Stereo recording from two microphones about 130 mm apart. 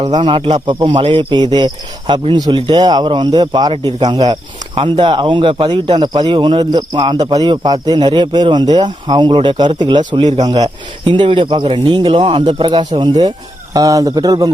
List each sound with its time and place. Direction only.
0.1 s speech: 40° right (ahead or behind)
13.7 s speech: 25° right (ahead or behind)